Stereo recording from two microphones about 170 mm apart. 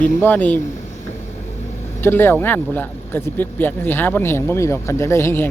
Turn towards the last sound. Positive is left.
turn(degrees=15)  # may be behind; listen again after turning